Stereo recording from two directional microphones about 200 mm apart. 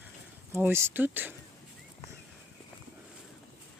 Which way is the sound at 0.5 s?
15° right (ahead or behind).